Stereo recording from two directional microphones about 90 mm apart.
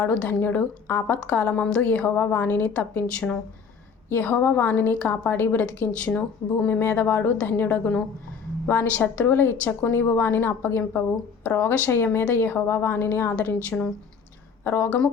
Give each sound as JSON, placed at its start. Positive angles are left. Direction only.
{"t": 0.0, "sound": "a woman's voice", "side_deg": 15}
{"t": 14.6, "sound": "speech", "side_deg": 30}